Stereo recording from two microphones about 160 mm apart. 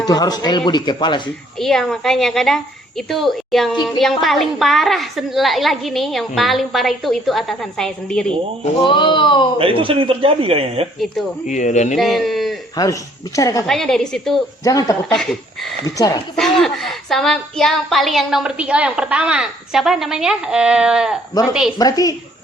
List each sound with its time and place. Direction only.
0.0 s speech: 25° left (ahead or behind)
1.5 s a woman's voice: centre (ahead or behind)
8.8 s speech: 30° left (ahead or behind)
9.6 s a man's voice: 35° right (ahead or behind)
11.4 s speech: 50° left (ahead or behind)
11.9 s speech: centre (ahead or behind)
12.7 s speech: 20° left (ahead or behind)
13.7 s a woman's voice: centre (ahead or behind)
14.6 s speech: 20° left (ahead or behind)
15.1 s a woman's voice: 5° left (ahead or behind)
16.0 s speech: 20° left (ahead or behind)
16.3 s a woman's voice: centre (ahead or behind)
21.8 s speech: 25° left (ahead or behind)